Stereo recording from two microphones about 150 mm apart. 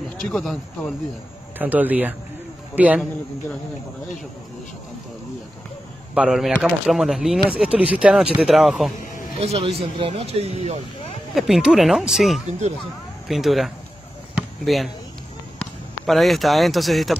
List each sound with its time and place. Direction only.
0.2 s speech: 5° left (ahead or behind)
1.6 s speech: 10° right (ahead or behind)
6.1 s speech: 5° right (ahead or behind)
9.4 s speech: 40° right (ahead or behind)
11.3 s speech: centre (ahead or behind)
12.4 s speech: 50° right (ahead or behind)
13.3 s speech: centre (ahead or behind)